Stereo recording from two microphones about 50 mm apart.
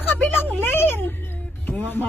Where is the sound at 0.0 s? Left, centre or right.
Left.